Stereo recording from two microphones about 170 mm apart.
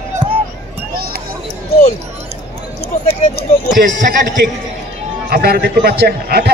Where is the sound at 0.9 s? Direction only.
60° right (ahead or behind).